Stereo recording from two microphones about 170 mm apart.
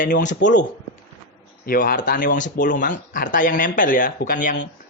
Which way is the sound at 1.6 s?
60° left (ahead or behind).